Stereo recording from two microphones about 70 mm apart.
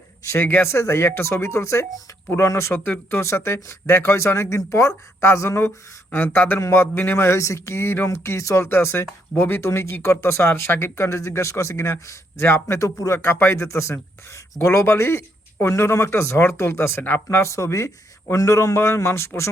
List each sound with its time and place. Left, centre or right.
0.3 s speech: left
2.8 s speech: left
6.1 s speech: left
6.6 s speech: left
7.3 s speech: left
12.8 s a man's voice: left
13.1 s a man's voice: left